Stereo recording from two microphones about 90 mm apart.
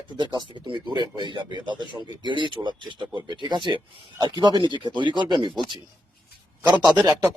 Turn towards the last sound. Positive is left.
turn(degrees=-45)  # may be behind; listen again after turning